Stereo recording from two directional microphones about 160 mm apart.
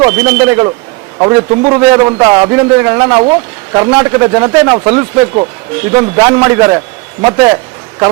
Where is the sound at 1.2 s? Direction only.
30° right (ahead or behind).